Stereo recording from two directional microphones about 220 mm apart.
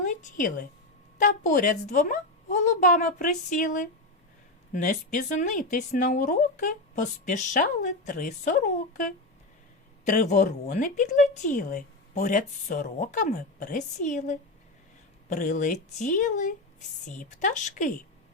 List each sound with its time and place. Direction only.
0.0 s a woman's voice: 35° left (ahead or behind)